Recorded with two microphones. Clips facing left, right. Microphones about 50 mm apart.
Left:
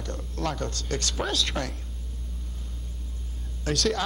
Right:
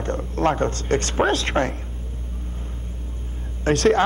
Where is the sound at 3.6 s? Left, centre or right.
Right.